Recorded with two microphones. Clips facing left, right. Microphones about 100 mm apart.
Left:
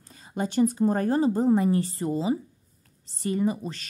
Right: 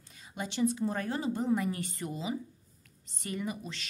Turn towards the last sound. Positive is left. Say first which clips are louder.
# left 10 dB
turn(degrees=40)  # may be behind; listen again after turning